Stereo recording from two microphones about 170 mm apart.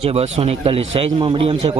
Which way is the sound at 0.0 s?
35° right (ahead or behind).